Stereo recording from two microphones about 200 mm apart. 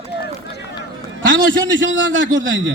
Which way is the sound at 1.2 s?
70° right (ahead or behind).